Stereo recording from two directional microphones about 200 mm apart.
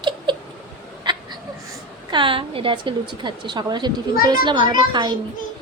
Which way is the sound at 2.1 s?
25° right (ahead or behind).